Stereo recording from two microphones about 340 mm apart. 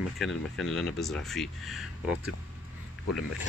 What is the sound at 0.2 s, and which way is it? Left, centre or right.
Speech, centre.